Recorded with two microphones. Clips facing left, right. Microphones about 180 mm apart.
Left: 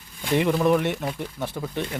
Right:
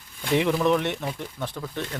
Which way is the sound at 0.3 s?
Centre (ahead or behind).